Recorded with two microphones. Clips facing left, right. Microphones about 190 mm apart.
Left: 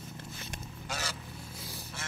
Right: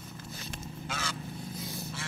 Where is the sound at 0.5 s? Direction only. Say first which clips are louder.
Right 1 dB; 40° left (ahead or behind).